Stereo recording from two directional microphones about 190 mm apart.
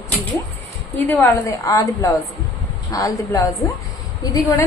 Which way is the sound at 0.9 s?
10° left (ahead or behind).